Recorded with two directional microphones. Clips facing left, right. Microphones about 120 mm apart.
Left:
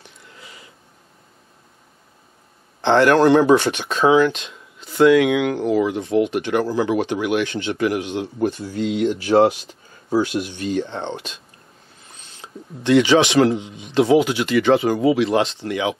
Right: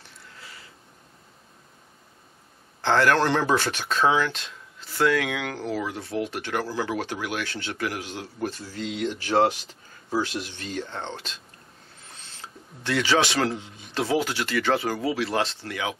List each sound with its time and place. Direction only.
0.0 s a sound: 15° left (ahead or behind)
2.8 s speech: 20° left (ahead or behind)
9.0 s speech: 5° left (ahead or behind)
10.0 s speech: 15° left (ahead or behind)